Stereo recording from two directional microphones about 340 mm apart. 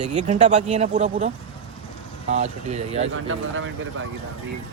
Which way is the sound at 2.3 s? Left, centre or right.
Centre.